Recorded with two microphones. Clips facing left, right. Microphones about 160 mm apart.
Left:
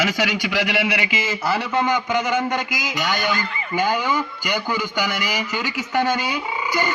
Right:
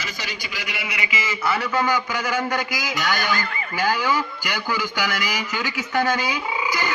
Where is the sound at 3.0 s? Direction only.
20° left (ahead or behind).